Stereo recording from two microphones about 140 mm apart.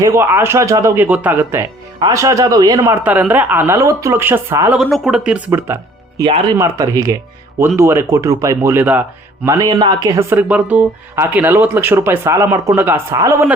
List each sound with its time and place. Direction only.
0.0 s a man's voice: 20° right (ahead or behind)
2.9 s speech: 10° right (ahead or behind)
4.7 s speech: centre (ahead or behind)
5.5 s speech: 20° right (ahead or behind)
6.2 s speech: 40° right (ahead or behind)
6.6 s a man's voice: 25° right (ahead or behind)
9.6 s speech: 30° right (ahead or behind)